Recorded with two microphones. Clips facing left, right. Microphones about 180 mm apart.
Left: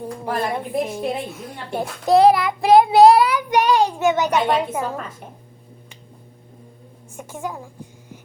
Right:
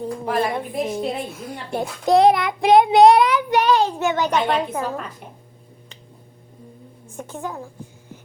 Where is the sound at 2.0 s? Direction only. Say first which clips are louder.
Left 1 dB; centre (ahead or behind).